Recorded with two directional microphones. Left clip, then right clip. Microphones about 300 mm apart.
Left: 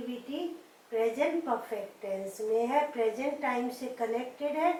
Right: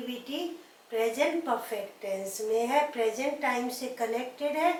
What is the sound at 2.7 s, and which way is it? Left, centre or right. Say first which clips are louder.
A woman's voice: right 2 dB; centre.